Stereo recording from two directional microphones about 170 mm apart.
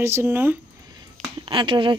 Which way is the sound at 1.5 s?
30° right (ahead or behind).